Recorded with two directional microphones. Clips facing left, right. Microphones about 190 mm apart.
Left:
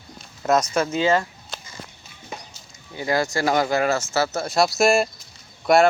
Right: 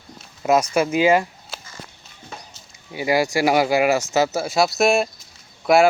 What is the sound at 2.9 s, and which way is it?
Speech, 10° right (ahead or behind).